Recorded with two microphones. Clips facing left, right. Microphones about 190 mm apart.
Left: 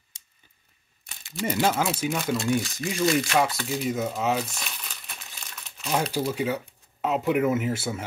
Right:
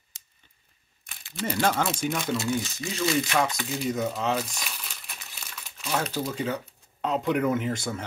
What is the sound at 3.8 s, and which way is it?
Speech, 5° left (ahead or behind).